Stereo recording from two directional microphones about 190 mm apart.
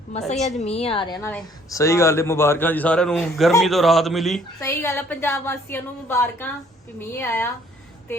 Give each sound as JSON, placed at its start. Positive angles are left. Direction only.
{"t": 0.1, "sound": "a woman's voice", "side_deg": 35}
{"t": 0.3, "sound": "a man's voice", "side_deg": 0}
{"t": 0.6, "sound": "a woman's voice", "side_deg": 35}
{"t": 4.6, "sound": "a woman's voice", "side_deg": 15}